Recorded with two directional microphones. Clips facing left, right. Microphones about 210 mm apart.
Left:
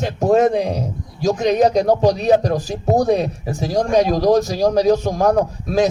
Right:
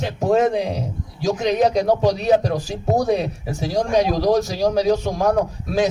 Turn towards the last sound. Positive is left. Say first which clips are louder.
# left 3 dB
turn(degrees=45)  # may be behind; listen again after turning